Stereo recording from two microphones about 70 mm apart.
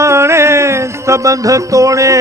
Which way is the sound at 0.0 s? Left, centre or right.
Right.